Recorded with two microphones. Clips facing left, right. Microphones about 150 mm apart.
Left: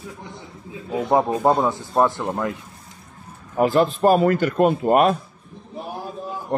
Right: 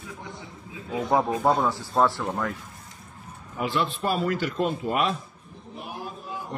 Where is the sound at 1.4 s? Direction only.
15° left (ahead or behind).